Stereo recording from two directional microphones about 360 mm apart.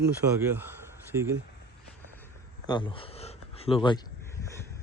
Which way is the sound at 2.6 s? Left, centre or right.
Centre.